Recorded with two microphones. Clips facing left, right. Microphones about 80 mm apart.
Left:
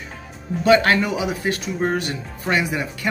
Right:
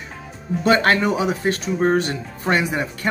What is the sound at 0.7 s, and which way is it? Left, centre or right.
A man's voice, right.